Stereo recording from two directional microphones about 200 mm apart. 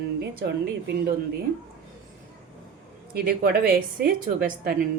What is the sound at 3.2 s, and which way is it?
A woman's voice, 50° right (ahead or behind).